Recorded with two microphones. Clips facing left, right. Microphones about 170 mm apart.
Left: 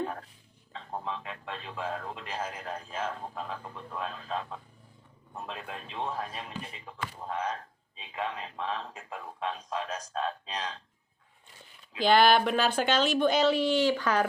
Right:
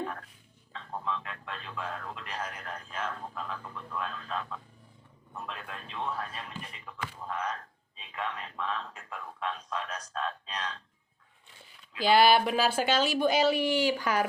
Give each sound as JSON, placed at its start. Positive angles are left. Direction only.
{"t": 0.9, "sound": "speech", "side_deg": 25}
{"t": 12.0, "sound": "speech", "side_deg": -5}